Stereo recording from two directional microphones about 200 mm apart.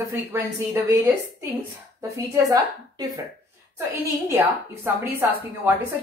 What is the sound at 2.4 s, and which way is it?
A woman's voice, 15° right (ahead or behind).